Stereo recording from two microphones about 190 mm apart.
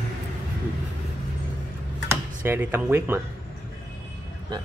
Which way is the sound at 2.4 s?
10° right (ahead or behind).